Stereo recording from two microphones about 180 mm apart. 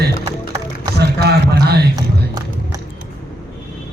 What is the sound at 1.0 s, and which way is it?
Speech, 65° right (ahead or behind).